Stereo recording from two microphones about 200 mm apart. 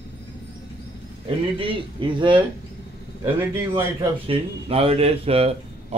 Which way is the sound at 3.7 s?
25° right (ahead or behind).